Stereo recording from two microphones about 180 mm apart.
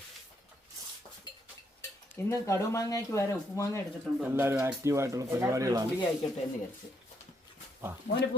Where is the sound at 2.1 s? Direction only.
15° left (ahead or behind).